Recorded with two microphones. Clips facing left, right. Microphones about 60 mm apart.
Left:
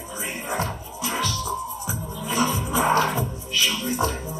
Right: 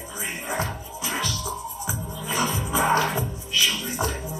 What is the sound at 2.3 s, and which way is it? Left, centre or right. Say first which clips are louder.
Music: left 2 dB; left.